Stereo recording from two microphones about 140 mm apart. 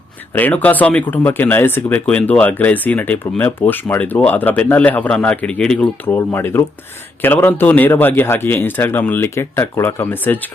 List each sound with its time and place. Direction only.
0.3 s speech: 10° left (ahead or behind)